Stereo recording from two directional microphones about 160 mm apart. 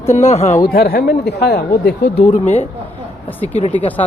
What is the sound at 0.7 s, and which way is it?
Speech, 70° left (ahead or behind).